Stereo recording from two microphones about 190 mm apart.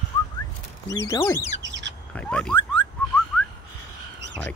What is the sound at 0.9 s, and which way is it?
Speech, 15° left (ahead or behind).